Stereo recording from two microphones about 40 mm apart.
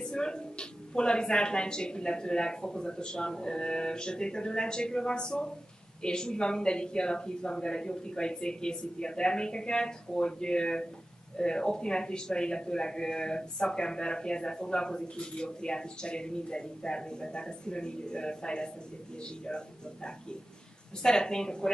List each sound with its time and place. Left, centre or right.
0.0 s speech: centre